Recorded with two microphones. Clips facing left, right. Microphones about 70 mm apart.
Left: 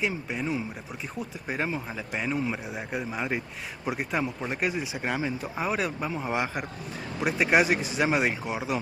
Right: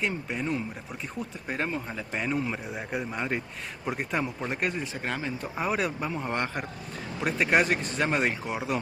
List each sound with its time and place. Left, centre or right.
0.0 s speech: centre